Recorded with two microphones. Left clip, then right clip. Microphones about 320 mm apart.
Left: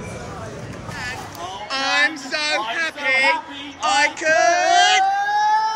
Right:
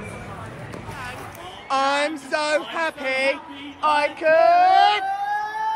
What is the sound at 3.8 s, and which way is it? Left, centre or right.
Female singing, centre.